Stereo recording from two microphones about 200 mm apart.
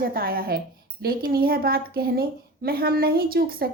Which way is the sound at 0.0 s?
50° right (ahead or behind).